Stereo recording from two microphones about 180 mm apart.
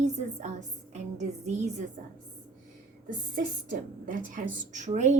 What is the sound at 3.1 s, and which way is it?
A woman's voice, 50° right (ahead or behind).